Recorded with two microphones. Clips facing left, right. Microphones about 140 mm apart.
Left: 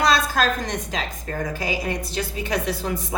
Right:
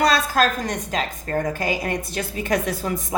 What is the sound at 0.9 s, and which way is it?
A woman's voice, 45° right (ahead or behind).